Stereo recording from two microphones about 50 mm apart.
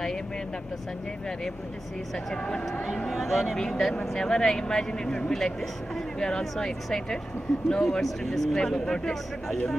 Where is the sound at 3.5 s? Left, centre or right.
Centre.